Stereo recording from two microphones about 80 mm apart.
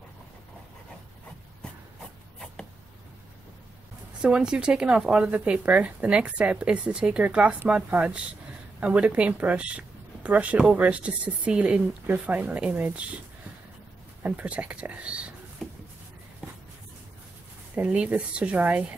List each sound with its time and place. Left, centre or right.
4.2 s speech: centre
14.2 s speech: centre
15.6 s a sound: centre
17.7 s speech: centre